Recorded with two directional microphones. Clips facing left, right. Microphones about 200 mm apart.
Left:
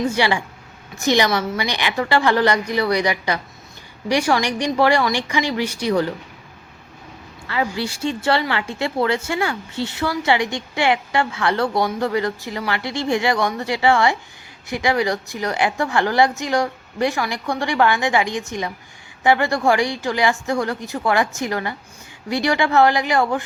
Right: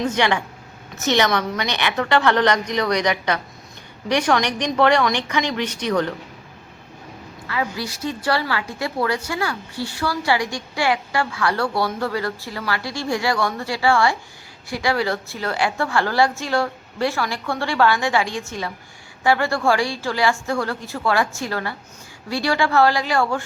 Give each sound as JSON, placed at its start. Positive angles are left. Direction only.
{"t": 0.0, "sound": "a woman's voice", "side_deg": 10}
{"t": 7.4, "sound": "a woman's voice", "side_deg": 30}